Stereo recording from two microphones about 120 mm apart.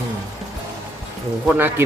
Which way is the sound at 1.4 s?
15° right (ahead or behind).